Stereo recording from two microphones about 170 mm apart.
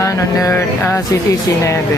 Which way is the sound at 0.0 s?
20° left (ahead or behind).